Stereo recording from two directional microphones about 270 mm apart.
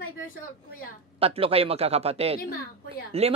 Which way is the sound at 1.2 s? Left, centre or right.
Right.